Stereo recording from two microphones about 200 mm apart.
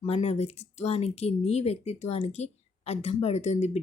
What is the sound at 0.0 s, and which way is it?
Speech, 30° left (ahead or behind).